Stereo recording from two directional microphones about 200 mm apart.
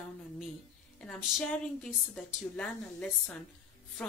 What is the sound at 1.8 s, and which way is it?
A woman's voice, 5° left (ahead or behind).